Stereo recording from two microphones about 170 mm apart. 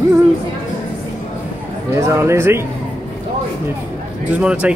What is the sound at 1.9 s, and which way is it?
Speech, 15° right (ahead or behind).